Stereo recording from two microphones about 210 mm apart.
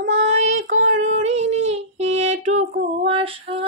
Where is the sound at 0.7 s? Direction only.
35° right (ahead or behind).